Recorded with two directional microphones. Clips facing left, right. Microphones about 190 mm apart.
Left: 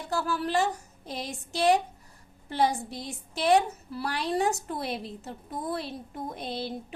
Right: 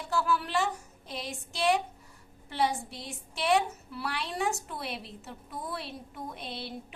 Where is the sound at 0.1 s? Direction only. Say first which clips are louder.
Left 1 dB; 40° left (ahead or behind).